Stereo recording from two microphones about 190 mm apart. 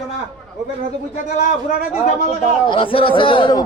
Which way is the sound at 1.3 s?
40° left (ahead or behind).